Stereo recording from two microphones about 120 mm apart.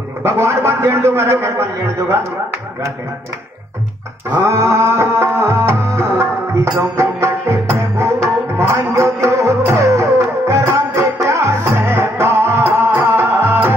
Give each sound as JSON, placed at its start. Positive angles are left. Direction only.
{"t": 0.2, "sound": "a man's voice", "side_deg": -20}
{"t": 4.3, "sound": "music", "side_deg": -20}